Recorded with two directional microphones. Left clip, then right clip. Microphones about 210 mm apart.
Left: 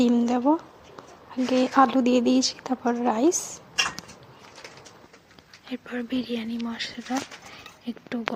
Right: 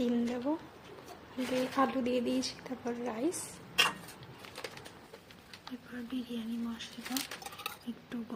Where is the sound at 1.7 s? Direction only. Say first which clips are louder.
Left 12 dB; 35° left (ahead or behind).